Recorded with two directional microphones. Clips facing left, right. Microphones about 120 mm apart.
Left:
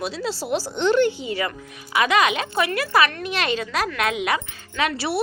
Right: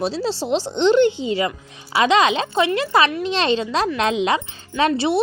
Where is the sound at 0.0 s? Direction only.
30° right (ahead or behind).